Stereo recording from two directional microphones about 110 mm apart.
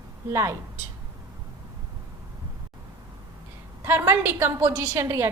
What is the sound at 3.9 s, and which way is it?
A woman's voice, 20° right (ahead or behind).